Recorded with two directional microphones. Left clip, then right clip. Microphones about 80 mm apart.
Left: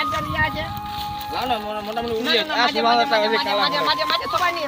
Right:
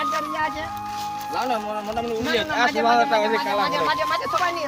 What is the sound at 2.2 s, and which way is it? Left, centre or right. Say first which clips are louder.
Speech: left 2 dB; left.